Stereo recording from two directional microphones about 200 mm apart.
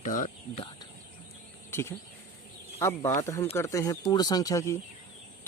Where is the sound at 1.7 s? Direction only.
10° left (ahead or behind).